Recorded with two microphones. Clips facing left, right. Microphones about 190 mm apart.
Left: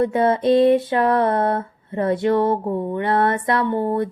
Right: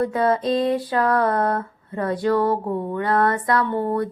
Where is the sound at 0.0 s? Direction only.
25° left (ahead or behind).